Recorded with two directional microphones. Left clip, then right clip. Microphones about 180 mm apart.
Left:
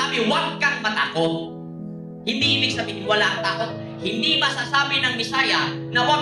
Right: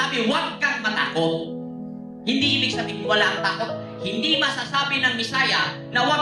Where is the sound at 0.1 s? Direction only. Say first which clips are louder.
Left 2 dB; 35° left (ahead or behind).